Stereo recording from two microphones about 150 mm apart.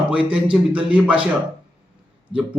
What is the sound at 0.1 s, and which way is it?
Speech, 10° right (ahead or behind).